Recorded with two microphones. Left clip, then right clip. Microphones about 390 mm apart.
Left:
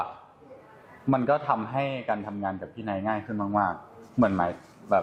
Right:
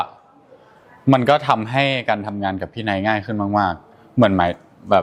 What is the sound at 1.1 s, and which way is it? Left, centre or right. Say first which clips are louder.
A man's voice: right 9 dB; right.